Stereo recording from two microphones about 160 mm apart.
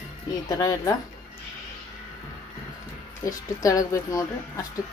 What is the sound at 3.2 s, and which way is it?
A woman's voice, 20° left (ahead or behind).